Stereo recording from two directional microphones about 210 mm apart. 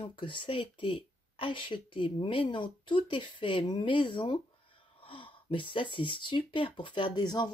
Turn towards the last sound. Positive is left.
turn(degrees=20)  # may be behind; listen again after turning